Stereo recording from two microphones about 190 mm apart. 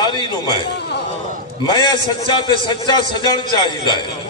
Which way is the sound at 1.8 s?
25° left (ahead or behind).